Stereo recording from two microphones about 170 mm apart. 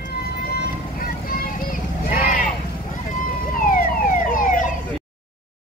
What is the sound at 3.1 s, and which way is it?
Emergency vehicle, 50° left (ahead or behind).